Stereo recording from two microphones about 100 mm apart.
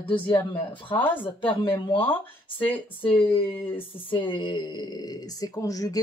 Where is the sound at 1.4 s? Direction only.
55° left (ahead or behind).